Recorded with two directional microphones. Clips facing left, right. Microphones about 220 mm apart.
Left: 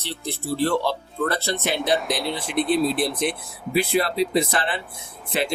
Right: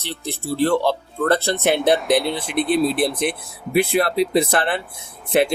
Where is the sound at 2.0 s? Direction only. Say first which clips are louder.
Right 7 dB; centre (ahead or behind).